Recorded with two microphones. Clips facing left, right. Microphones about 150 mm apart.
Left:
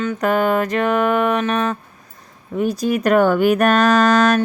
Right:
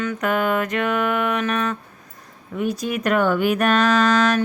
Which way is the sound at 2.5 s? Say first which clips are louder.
Left 5 dB; 35° left (ahead or behind).